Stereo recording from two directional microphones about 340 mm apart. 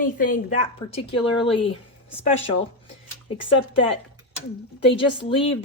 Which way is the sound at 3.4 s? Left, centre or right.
Centre.